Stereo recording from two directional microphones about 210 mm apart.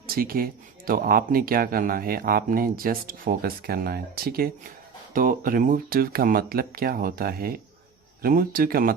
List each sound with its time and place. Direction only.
0.1 s speech: 45° right (ahead or behind)